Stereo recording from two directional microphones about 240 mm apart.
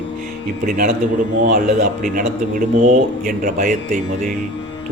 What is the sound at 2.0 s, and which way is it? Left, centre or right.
Speech, right.